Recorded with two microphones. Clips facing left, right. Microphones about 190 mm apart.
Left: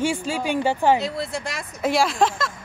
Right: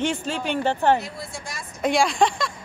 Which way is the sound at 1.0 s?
70° left (ahead or behind).